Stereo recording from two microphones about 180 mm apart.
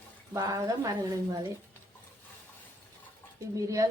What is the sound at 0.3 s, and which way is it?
A woman's voice, 20° right (ahead or behind).